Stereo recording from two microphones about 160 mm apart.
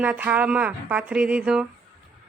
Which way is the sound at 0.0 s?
10° right (ahead or behind).